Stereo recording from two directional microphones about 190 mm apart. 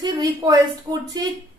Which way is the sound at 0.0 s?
20° right (ahead or behind).